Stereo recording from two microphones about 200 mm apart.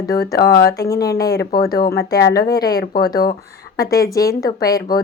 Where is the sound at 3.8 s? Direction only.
15° left (ahead or behind).